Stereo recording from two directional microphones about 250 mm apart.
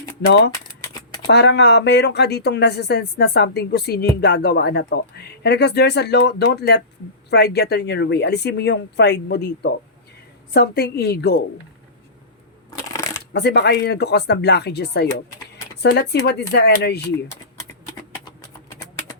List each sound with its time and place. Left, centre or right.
1.3 s speech: left
12.9 s shuffling cards: centre
13.3 s speech: left